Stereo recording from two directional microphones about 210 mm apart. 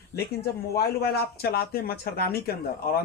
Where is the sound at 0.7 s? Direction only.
45° left (ahead or behind).